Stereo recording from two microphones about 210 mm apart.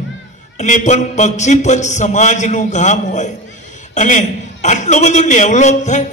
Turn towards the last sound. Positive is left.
turn(degrees=35)  # may be behind; listen again after turning